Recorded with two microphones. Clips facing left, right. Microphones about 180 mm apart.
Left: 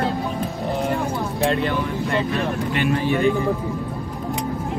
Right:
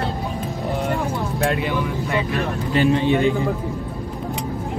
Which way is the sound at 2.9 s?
20° right (ahead or behind).